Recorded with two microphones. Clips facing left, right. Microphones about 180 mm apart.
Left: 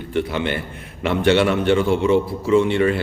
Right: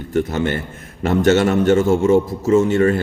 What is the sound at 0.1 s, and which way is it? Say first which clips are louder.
Speech: right 3 dB; 45° right (ahead or behind).